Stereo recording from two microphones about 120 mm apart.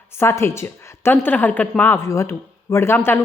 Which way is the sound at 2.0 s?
25° left (ahead or behind).